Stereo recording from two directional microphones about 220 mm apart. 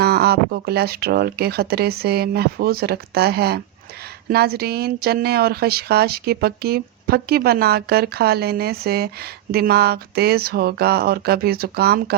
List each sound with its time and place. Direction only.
0.0 s speech: 45° right (ahead or behind)